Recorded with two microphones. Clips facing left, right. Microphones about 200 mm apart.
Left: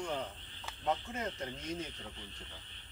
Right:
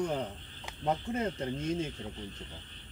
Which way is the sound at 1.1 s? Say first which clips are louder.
Right 7 dB; 30° right (ahead or behind).